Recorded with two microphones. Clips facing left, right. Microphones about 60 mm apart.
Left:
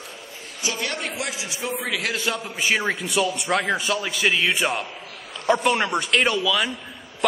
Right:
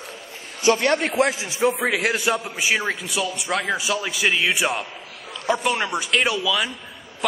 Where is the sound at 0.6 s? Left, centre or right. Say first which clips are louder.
Right 9 dB; right; by 2.5 s centre.